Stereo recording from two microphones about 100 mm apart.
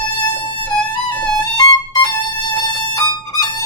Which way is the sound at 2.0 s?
45° left (ahead or behind).